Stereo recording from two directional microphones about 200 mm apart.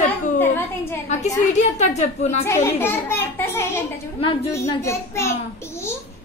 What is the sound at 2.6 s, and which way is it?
A child's voice, 10° left (ahead or behind).